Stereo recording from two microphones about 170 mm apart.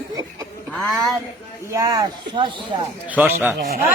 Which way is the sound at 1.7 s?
20° right (ahead or behind).